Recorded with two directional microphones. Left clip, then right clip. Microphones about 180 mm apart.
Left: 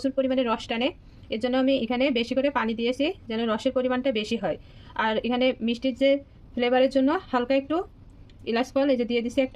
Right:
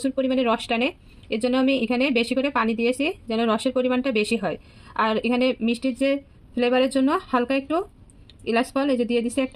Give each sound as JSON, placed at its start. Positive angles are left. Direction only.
{"t": 0.0, "sound": "speech", "side_deg": -25}